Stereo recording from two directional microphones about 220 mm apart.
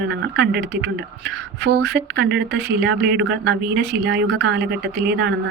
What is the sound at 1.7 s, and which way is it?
Speech, 55° right (ahead or behind).